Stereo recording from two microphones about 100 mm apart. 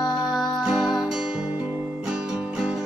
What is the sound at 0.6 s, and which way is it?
Music, 5° right (ahead or behind).